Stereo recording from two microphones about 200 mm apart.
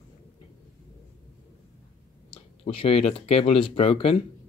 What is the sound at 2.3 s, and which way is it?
Speech, 25° left (ahead or behind).